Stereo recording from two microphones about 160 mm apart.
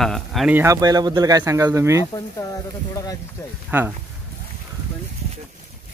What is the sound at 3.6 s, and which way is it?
Speech, 10° right (ahead or behind).